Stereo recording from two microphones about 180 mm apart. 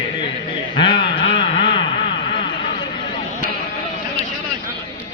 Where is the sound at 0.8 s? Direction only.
25° left (ahead or behind).